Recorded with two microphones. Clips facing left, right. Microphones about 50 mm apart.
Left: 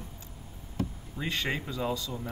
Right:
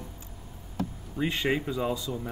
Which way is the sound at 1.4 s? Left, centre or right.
Centre.